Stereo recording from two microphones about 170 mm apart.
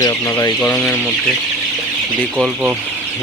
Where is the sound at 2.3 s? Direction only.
5° right (ahead or behind).